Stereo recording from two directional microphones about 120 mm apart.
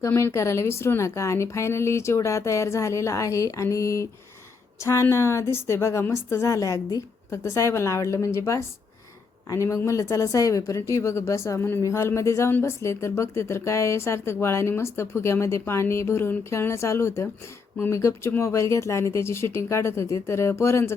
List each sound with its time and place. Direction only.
0.0 s a woman's voice: 20° left (ahead or behind)